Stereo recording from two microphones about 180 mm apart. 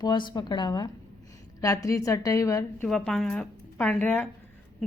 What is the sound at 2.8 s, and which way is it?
A woman's voice, 5° left (ahead or behind).